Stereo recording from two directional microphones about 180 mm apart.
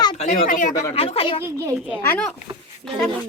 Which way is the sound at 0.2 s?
40° left (ahead or behind).